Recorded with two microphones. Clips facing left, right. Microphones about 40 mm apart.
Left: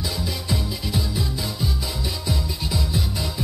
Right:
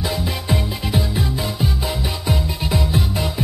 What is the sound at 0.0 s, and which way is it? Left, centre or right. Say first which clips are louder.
Music: right 5 dB; right.